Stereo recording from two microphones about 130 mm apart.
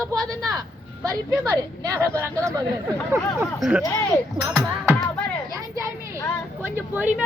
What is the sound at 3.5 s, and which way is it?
A woman's voice, 5° right (ahead or behind).